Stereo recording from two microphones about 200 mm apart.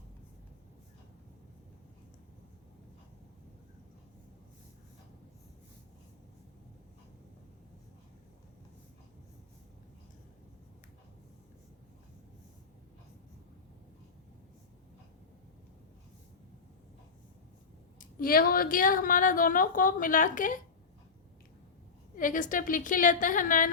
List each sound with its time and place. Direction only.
18.0 s a woman's voice: 45° left (ahead or behind)
22.2 s a woman's voice: 40° left (ahead or behind)